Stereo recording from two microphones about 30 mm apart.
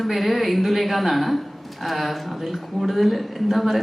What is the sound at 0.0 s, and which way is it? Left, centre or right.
A woman's voice, centre.